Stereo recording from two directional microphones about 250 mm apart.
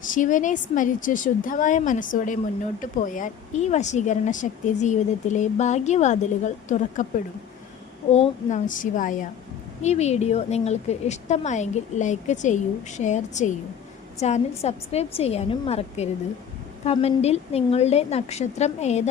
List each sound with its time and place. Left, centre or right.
0.1 s a woman's voice: left
8.1 s a woman's voice: left